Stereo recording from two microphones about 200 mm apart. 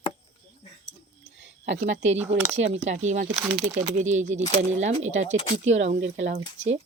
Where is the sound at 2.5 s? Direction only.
35° right (ahead or behind).